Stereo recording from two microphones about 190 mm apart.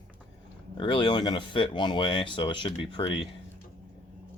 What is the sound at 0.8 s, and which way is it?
Speech, 25° left (ahead or behind).